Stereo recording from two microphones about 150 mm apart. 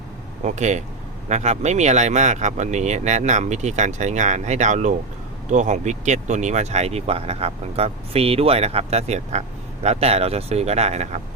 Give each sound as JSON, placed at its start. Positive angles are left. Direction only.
{"t": 0.4, "sound": "speech", "side_deg": -50}